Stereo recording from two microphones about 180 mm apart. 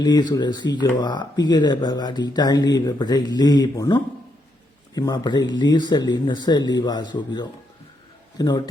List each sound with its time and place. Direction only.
0.0 s speech: 20° left (ahead or behind)